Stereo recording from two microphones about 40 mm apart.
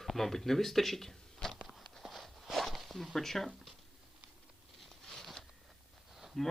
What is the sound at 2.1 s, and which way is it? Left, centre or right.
Walk, centre.